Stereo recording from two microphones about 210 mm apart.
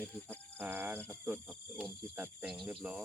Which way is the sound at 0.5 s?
10° right (ahead or behind).